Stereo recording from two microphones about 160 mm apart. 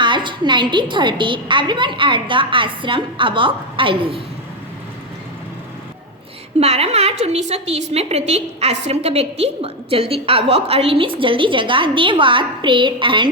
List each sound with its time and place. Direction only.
0.0 s a woman's voice: 30° right (ahead or behind)
6.6 s a woman's voice: 40° right (ahead or behind)